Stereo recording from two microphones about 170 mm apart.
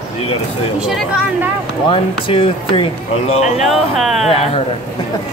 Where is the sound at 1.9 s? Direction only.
30° left (ahead or behind).